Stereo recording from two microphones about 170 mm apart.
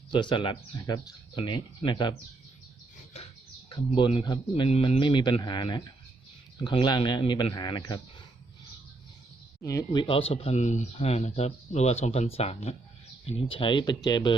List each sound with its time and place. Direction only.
0.1 s speech: 30° left (ahead or behind)
3.7 s speech: 30° left (ahead or behind)
9.6 s speech: 20° left (ahead or behind)